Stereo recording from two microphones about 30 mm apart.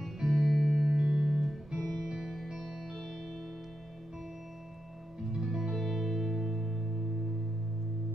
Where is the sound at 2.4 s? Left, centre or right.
Centre.